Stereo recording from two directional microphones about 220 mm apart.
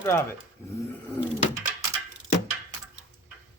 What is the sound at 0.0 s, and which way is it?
Speech, 10° left (ahead or behind).